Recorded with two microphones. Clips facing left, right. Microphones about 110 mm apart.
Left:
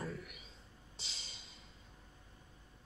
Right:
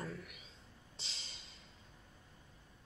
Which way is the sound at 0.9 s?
Centre (ahead or behind).